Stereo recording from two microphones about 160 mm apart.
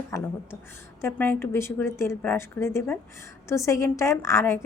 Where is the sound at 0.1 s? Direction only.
15° left (ahead or behind).